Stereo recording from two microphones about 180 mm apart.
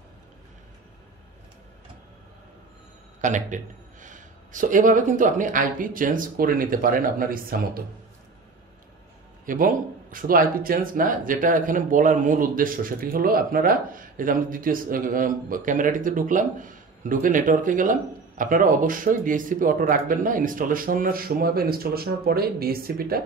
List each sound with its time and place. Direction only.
3.2 s speech: 45° right (ahead or behind)
9.5 s speech: 50° right (ahead or behind)